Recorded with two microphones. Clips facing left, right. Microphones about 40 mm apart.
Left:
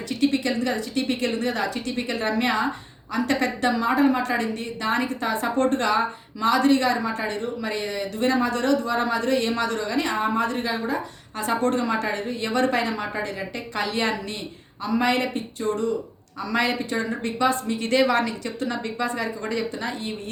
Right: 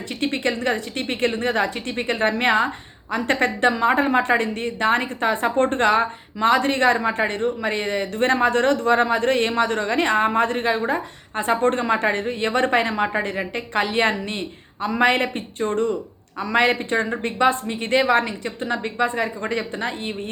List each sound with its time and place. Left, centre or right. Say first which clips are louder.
0.1 s a woman's voice: left 1 dB; right